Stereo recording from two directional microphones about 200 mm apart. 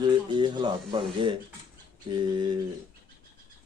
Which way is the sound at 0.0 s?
20° right (ahead or behind).